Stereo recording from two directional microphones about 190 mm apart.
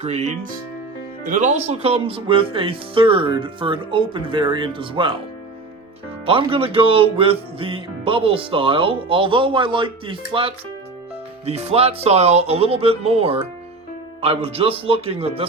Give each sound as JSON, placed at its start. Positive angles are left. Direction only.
{"t": 0.0, "sound": "speech", "side_deg": -35}
{"t": 6.2, "sound": "speech", "side_deg": -30}